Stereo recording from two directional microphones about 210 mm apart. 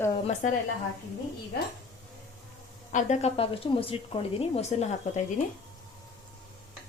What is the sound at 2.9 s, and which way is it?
A woman's voice, 35° left (ahead or behind).